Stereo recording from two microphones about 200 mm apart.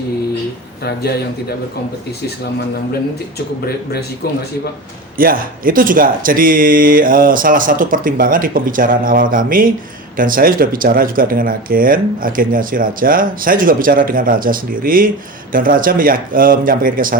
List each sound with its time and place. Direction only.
0.8 s a man's voice: 50° left (ahead or behind)
5.1 s speech: 45° right (ahead or behind)